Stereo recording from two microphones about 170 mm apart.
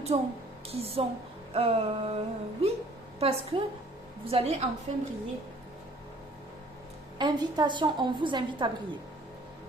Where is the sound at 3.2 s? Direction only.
35° right (ahead or behind).